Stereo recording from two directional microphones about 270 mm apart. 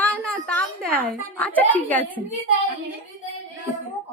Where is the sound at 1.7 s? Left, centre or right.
Centre.